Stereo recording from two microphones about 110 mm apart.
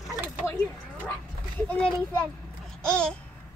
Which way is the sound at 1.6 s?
10° left (ahead or behind).